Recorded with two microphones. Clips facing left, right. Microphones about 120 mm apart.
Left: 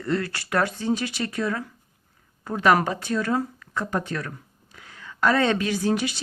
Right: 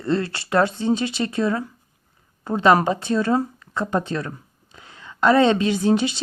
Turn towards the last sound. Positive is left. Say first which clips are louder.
# right 5 dB
turn(degrees=-25)  # may be behind; listen again after turning